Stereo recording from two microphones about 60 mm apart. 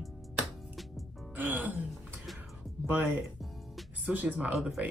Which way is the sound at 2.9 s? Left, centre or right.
Right.